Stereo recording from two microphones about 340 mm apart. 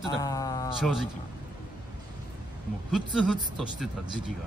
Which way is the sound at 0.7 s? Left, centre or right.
Centre.